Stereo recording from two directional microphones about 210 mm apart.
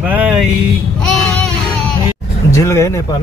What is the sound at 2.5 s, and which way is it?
Speech, 15° left (ahead or behind).